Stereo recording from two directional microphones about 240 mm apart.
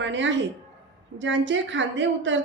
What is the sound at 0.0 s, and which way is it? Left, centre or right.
A woman's voice, right.